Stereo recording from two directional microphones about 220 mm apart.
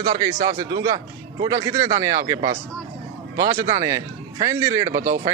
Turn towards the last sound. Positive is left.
turn(degrees=-35)  # may be behind; listen again after turning